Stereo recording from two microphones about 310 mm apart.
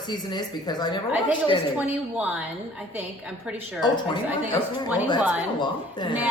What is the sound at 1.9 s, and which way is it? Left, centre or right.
Speech, centre.